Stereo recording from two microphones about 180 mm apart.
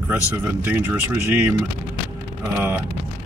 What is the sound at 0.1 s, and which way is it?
Speech, 10° right (ahead or behind).